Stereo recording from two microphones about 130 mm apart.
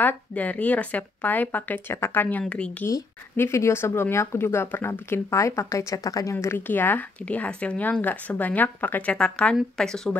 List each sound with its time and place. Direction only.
0.0 s speech: 10° left (ahead or behind)